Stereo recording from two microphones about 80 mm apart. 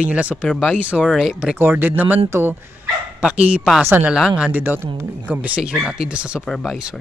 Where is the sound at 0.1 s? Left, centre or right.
Centre.